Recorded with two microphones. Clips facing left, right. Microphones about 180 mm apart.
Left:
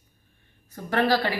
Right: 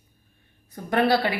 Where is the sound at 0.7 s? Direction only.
15° right (ahead or behind).